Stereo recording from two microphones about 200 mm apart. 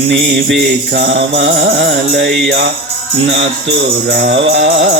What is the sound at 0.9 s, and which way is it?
Music, 60° right (ahead or behind).